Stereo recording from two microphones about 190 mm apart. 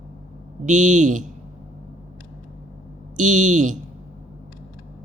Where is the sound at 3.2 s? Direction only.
40° right (ahead or behind).